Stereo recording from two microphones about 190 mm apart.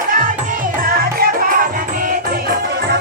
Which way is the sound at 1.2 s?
50° right (ahead or behind).